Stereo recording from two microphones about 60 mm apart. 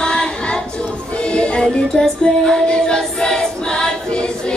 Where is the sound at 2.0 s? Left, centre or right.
Centre.